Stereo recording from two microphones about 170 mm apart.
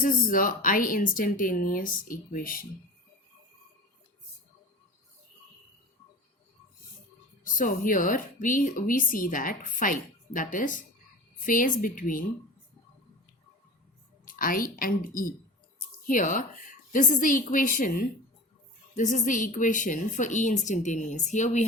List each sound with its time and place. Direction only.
0.0 s speech: 55° left (ahead or behind)
7.4 s speech: 50° left (ahead or behind)
14.3 s a woman's voice: 55° left (ahead or behind)